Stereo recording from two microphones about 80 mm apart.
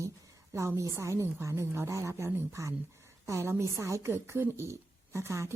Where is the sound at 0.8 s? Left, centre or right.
Right.